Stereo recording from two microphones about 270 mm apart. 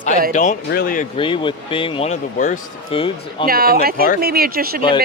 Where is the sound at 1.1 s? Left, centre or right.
Centre.